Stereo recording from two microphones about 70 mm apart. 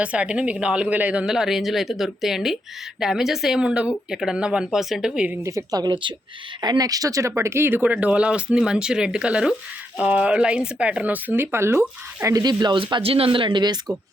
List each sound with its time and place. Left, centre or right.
0.0 s speech: centre
1.2 s speech: centre
5.1 s speech: centre
5.4 s speech: right
6.6 s speech: right
7.8 s speech: right
12.3 s speech: right